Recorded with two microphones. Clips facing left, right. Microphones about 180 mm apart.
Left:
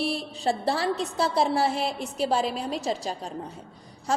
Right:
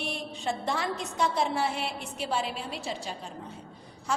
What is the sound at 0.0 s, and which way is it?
A woman's voice, 35° left (ahead or behind).